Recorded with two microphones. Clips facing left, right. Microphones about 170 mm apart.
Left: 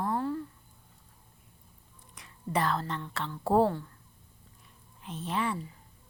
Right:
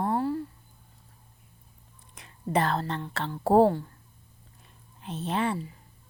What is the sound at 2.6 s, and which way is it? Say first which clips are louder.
A woman's voice: right 2 dB; 30° right (ahead or behind).